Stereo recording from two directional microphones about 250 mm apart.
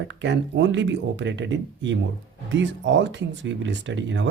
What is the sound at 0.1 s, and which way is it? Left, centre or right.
Speech, right.